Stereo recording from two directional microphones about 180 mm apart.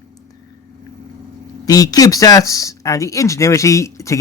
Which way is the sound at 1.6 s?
20° left (ahead or behind).